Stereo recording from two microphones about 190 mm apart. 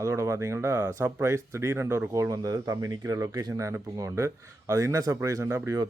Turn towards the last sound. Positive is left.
turn(degrees=-15)  # may be behind; listen again after turning